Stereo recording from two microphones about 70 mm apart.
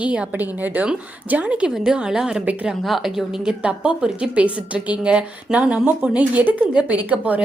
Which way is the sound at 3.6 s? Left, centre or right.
Centre.